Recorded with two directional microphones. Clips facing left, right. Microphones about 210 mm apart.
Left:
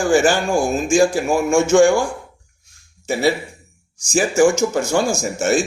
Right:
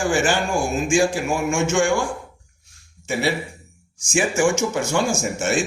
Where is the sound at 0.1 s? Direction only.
40° left (ahead or behind).